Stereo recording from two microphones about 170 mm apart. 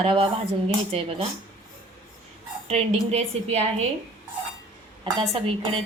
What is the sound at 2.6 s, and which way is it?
A woman's voice, 35° right (ahead or behind).